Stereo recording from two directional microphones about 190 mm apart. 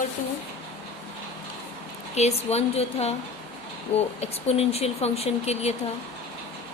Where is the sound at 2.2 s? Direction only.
35° left (ahead or behind).